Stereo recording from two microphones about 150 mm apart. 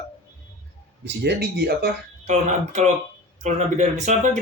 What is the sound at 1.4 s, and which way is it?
Speech, 90° right.